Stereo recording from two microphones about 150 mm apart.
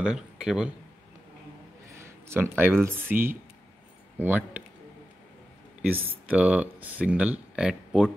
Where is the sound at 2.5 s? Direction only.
15° right (ahead or behind).